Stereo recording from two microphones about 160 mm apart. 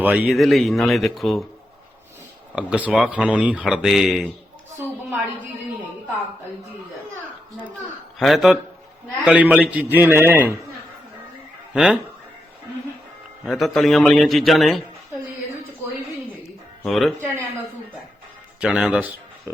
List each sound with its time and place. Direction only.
0.0 s speech: 10° right (ahead or behind)
2.6 s speech: 5° right (ahead or behind)
8.2 s a man's voice: centre (ahead or behind)
11.7 s speech: 5° right (ahead or behind)
13.4 s speech: centre (ahead or behind)
16.8 s speech: centre (ahead or behind)
18.6 s a man's voice: 5° right (ahead or behind)